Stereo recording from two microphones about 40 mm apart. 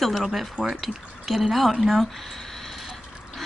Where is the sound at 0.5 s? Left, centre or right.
Right.